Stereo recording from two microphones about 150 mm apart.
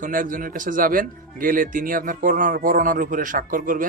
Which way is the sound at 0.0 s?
65° right (ahead or behind).